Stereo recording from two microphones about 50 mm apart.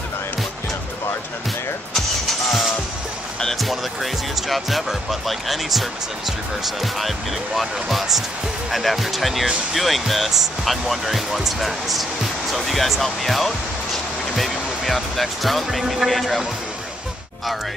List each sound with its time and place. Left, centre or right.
2.0 s music: centre
3.5 s speech: centre